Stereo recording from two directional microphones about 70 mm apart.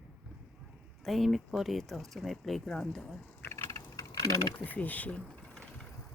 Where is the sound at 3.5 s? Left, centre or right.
Left.